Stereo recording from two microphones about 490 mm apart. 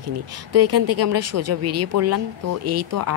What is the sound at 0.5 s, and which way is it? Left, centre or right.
Speech, right.